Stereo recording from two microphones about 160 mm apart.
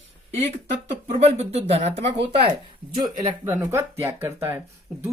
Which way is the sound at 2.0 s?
90° right.